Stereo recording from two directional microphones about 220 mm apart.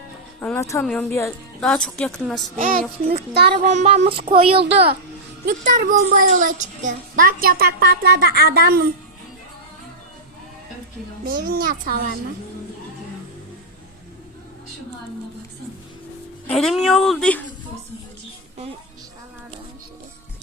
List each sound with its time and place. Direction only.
0.3 s a woman's voice: 10° left (ahead or behind)
2.6 s a child's voice: 40° right (ahead or behind)
3.7 s child singing: 30° right (ahead or behind)
5.5 s a child's voice: 35° right (ahead or behind)
11.3 s a child's voice: 40° right (ahead or behind)
16.5 s a woman's voice: centre (ahead or behind)